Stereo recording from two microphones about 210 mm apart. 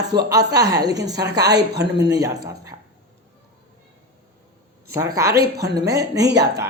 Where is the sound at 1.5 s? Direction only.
55° right (ahead or behind).